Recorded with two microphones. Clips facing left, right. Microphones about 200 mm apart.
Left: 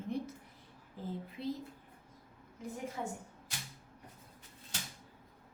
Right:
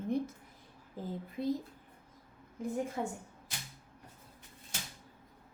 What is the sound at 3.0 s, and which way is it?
Speech, 50° right (ahead or behind).